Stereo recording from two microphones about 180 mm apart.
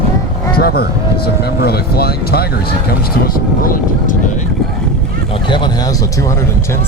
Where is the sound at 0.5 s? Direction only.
60° left (ahead or behind).